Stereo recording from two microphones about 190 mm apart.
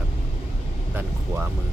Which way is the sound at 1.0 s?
10° right (ahead or behind).